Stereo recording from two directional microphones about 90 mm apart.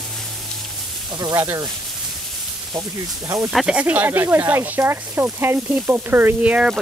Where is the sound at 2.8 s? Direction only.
35° right (ahead or behind).